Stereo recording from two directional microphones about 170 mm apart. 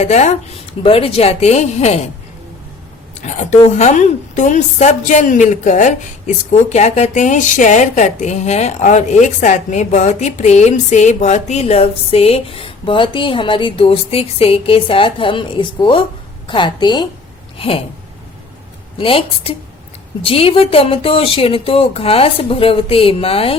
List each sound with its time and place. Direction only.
0.0 s a woman's voice: 40° left (ahead or behind)
3.2 s a woman's voice: 45° left (ahead or behind)
18.9 s speech: 30° left (ahead or behind)